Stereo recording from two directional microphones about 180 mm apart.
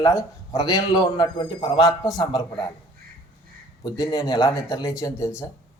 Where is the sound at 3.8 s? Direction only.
20° left (ahead or behind).